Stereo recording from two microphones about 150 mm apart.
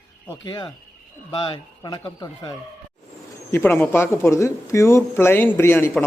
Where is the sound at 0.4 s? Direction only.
30° left (ahead or behind).